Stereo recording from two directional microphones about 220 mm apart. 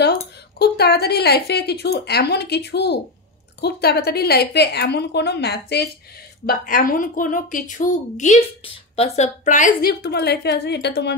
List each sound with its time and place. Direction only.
0.6 s a woman's voice: 45° left (ahead or behind)